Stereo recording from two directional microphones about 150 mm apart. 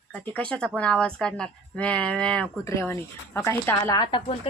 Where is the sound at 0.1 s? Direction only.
10° left (ahead or behind).